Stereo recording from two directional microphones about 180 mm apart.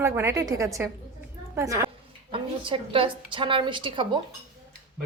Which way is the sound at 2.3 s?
30° right (ahead or behind).